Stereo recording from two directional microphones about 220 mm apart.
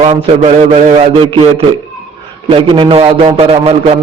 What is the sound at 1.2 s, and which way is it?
Speech, 25° right (ahead or behind).